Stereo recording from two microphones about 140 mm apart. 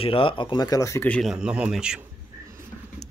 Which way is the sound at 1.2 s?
5° right (ahead or behind).